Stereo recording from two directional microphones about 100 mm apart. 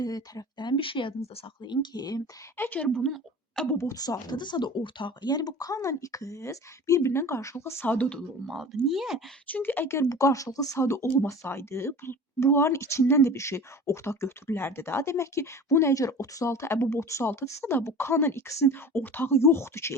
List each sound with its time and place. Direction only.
0.0 s speech: 40° left (ahead or behind); by 1.1 s 60° left (ahead or behind)
1.6 s speech: 50° left (ahead or behind)
2.6 s a woman's voice: 15° left (ahead or behind)
3.0 s speech: 5° left (ahead or behind)
3.8 s speech: 35° left (ahead or behind)
8.4 s speech: centre (ahead or behind)
9.5 s speech: 20° left (ahead or behind)